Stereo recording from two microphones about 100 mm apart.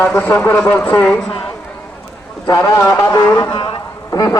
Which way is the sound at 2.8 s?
30° left (ahead or behind).